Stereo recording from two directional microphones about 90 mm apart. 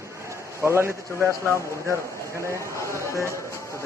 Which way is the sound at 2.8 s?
35° left (ahead or behind).